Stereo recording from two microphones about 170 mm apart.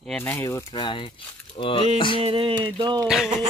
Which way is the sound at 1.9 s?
30° left (ahead or behind).